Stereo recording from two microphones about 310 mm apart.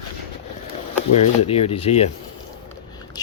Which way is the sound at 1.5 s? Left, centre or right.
Centre.